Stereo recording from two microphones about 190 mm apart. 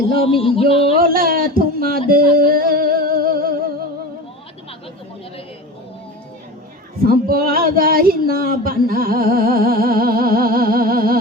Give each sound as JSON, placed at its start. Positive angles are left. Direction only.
{"t": 0.4, "sound": "music", "side_deg": 30}
{"t": 0.9, "sound": "speech", "side_deg": -50}
{"t": 7.0, "sound": "a sound", "side_deg": -50}